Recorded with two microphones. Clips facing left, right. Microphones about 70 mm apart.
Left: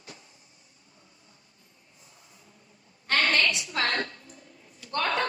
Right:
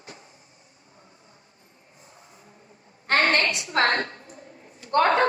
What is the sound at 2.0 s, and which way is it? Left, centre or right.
Music, right.